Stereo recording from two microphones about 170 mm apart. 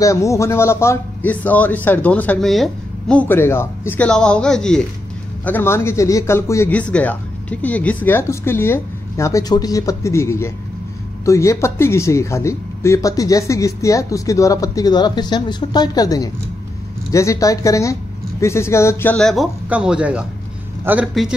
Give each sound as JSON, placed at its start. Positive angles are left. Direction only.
{"t": 0.0, "sound": "speech", "side_deg": 20}